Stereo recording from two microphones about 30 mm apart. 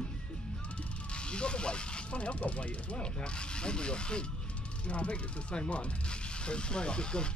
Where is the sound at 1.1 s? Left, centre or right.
Left.